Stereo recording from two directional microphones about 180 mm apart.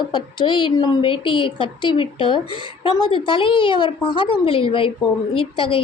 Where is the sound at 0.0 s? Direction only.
25° left (ahead or behind).